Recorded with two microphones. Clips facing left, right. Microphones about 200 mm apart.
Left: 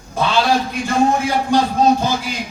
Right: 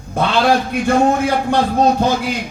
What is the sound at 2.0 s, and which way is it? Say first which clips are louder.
Speech: right 4 dB; 60° right (ahead or behind).